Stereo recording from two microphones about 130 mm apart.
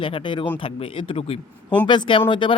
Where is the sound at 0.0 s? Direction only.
40° left (ahead or behind).